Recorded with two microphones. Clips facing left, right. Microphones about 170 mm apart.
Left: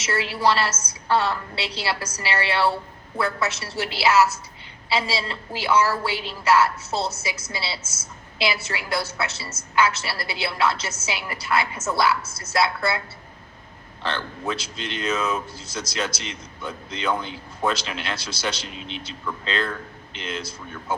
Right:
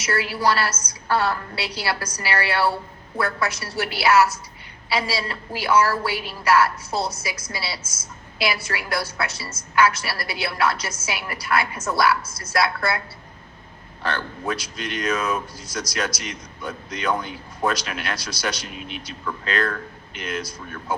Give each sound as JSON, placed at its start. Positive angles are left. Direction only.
{"t": 0.0, "sound": "a woman's voice", "side_deg": 25}
{"t": 14.0, "sound": "a woman's voice", "side_deg": 25}